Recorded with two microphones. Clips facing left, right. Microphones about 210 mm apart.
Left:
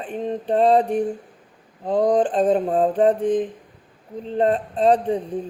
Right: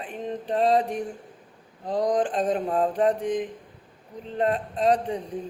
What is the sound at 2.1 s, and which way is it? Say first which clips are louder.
Mantra: left 6 dB; 30° left (ahead or behind).